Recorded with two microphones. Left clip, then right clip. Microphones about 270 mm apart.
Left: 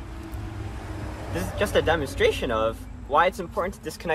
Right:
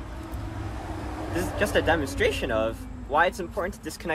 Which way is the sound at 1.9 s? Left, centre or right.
Centre.